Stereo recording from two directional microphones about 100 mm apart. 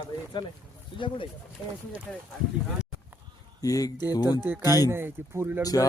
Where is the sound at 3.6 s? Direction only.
35° left (ahead or behind).